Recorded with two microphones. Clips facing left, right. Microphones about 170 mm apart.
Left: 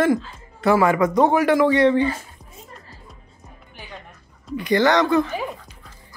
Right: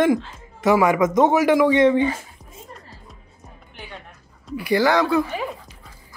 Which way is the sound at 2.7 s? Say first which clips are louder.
Right 1 dB; centre (ahead or behind).